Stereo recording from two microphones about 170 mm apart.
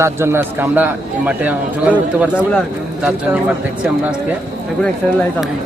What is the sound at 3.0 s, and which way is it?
A man's voice, 5° right (ahead or behind).